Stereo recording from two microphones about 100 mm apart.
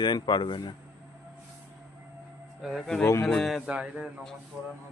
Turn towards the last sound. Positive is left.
turn(degrees=-15)  # may be behind; listen again after turning